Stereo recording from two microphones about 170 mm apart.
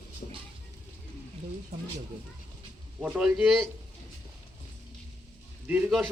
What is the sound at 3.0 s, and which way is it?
Speech, 5° right (ahead or behind).